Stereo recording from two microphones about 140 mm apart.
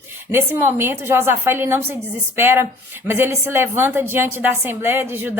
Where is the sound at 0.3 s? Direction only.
15° right (ahead or behind).